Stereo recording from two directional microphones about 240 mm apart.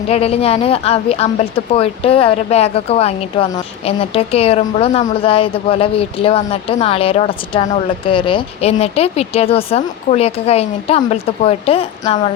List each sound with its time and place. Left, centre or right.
0.1 s a woman's voice: left